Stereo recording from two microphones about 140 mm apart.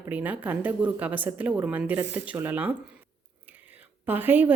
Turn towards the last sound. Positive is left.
turn(degrees=-15)  # may be behind; listen again after turning